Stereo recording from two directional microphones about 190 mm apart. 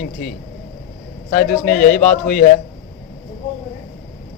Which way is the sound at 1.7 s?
50° left (ahead or behind).